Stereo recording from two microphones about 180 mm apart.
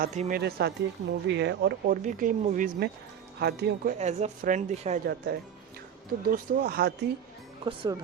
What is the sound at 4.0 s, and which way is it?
Speech, 40° right (ahead or behind).